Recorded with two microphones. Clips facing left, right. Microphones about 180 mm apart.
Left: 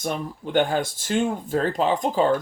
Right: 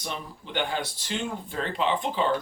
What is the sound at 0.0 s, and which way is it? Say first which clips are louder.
Speech: left 8 dB; 45° left (ahead or behind).